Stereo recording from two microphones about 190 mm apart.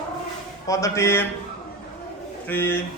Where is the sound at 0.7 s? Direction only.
15° left (ahead or behind).